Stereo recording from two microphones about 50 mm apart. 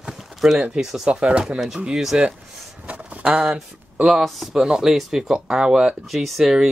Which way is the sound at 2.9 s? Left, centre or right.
Right.